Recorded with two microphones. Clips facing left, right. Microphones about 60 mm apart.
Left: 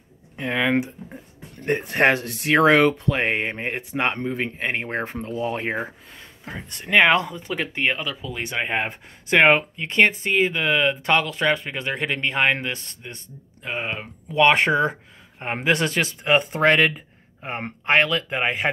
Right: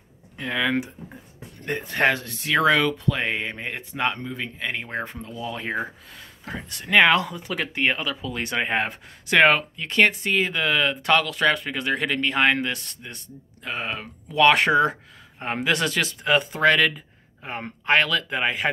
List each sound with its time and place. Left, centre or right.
0.4 s speech: left
1.7 s speech: left
5.7 s speech: left
6.9 s speech: centre
7.8 s speech: centre
8.8 s speech: left